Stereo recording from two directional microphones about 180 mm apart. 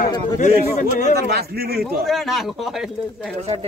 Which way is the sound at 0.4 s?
45° left (ahead or behind).